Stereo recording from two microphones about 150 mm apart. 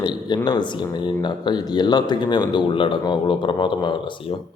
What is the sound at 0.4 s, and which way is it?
A man's voice, 30° left (ahead or behind).